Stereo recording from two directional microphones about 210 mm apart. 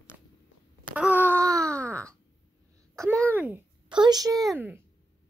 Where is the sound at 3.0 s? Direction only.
15° right (ahead or behind).